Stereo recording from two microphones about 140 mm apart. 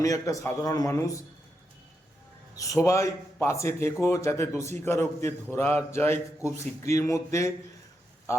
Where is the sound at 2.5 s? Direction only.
25° left (ahead or behind).